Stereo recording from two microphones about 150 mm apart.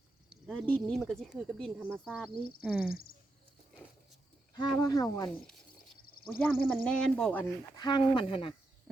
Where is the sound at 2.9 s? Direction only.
80° left.